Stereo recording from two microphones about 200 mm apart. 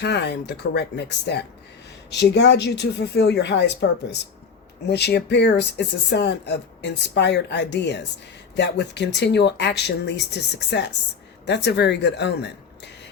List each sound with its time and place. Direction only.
0.0 s speech: 55° left (ahead or behind)